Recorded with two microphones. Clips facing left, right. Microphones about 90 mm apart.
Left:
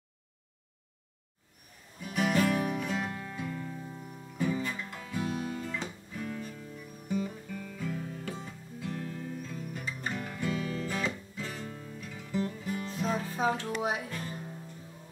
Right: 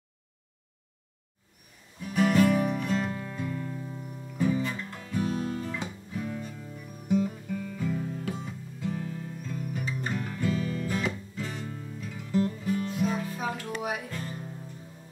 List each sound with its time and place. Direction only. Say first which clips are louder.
2.0 s music: right 5 dB; centre (ahead or behind)
4.4 s guitar: right 4 dB; centre (ahead or behind)
7.1 s music: right 7 dB; centre (ahead or behind)
13.2 s music: left 3 dB; 30° left (ahead or behind)